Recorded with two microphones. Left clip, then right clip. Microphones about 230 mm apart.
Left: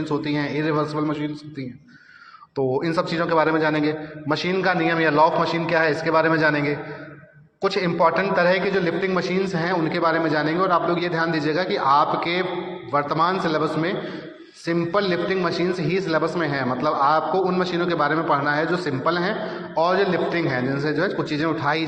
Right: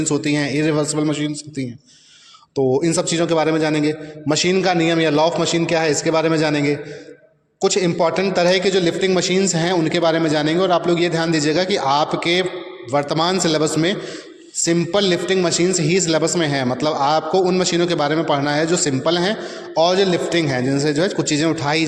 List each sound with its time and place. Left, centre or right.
0.0 s a man's voice: right
2.8 s a man's voice: right